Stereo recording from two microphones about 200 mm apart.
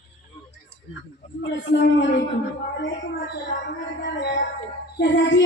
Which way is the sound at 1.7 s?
65° left (ahead or behind).